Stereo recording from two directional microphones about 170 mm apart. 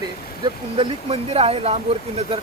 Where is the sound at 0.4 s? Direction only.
35° right (ahead or behind).